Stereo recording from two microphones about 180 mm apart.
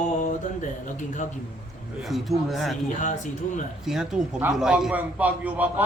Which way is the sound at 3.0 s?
40° left (ahead or behind).